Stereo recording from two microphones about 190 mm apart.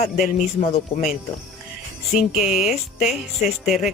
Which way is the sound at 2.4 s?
5° right (ahead or behind).